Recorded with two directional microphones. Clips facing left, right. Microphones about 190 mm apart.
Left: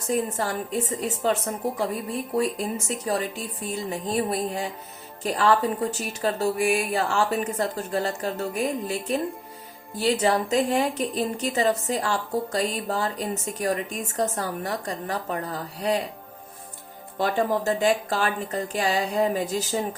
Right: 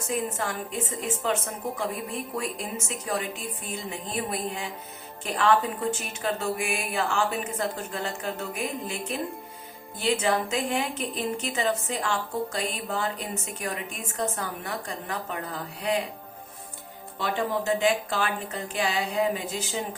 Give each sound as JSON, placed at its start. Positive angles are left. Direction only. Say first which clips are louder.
{"t": 0.1, "sound": "speech", "louder": "left 4 dB", "side_deg": 35}
{"t": 17.2, "sound": "a woman's voice", "louder": "left 4 dB", "side_deg": 45}